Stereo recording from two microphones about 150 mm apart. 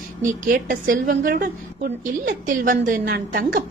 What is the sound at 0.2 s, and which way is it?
A woman's voice, 65° right (ahead or behind).